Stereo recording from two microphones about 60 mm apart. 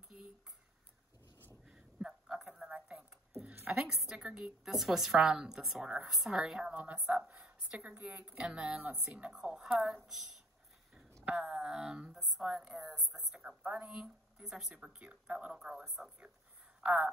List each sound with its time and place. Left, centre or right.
1.7 s a sound: centre
3.7 s speech: centre
4.3 s speech: centre
4.6 s speech: centre
6.4 s speech: centre
6.7 s a woman's voice: right
12.1 s a sound: centre
13.4 s a sound: centre
13.8 s speech: centre
15.6 s speech: centre
16.8 s a woman's voice: right